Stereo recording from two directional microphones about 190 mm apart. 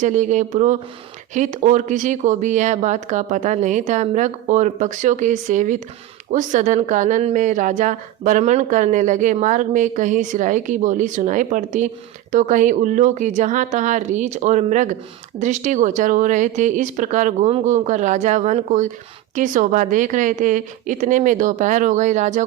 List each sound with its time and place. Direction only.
0.0 s a woman's voice: 40° right (ahead or behind)